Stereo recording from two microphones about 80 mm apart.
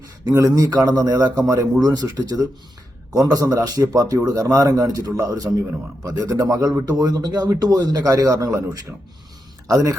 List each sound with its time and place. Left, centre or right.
0.3 s speech: right
6.8 s a man's voice: right